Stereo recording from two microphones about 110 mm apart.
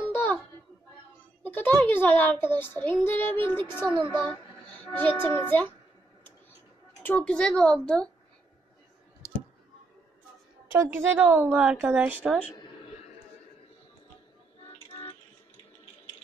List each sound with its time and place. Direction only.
0.1 s a sound: 15° left (ahead or behind)
1.4 s a sound: 15° left (ahead or behind)
1.8 s speech: 15° left (ahead or behind)
7.0 s speech: 15° left (ahead or behind)
10.7 s a woman's voice: 20° right (ahead or behind)
14.9 s music: 60° left (ahead or behind)